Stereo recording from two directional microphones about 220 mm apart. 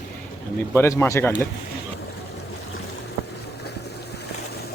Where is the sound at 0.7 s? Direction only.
10° left (ahead or behind).